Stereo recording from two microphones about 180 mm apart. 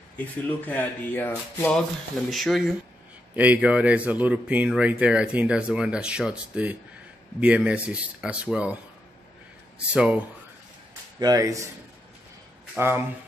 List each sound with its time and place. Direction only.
0.2 s speech: 10° left (ahead or behind)
2.3 s speech: centre (ahead or behind)
9.8 s speech: 5° right (ahead or behind)
11.1 s speech: 20° right (ahead or behind)
12.7 s speech: 15° right (ahead or behind)